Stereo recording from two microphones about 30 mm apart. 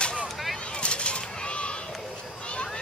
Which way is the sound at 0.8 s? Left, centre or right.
Left.